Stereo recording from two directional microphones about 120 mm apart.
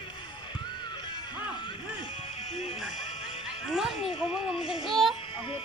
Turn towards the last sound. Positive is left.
turn(degrees=0)  # may be behind; listen again after turning